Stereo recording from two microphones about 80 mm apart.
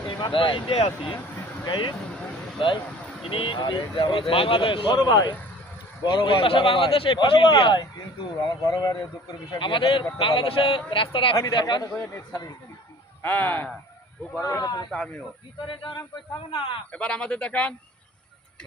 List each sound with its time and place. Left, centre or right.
0.2 s speech: left
1.6 s speech: left
2.6 s speech: left
5.1 s speech: left
6.0 s a man's voice: left
8.6 s speech: left
9.6 s speech: left
11.3 s speech: left
11.9 s speech: left
14.6 s speech: left
14.8 s speech: centre
15.6 s speech: left
16.9 s speech: centre